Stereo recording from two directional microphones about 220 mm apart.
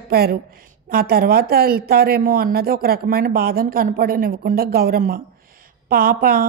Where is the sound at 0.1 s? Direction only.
45° right (ahead or behind).